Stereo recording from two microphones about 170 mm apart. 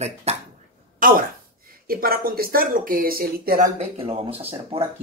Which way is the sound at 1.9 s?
60° right (ahead or behind).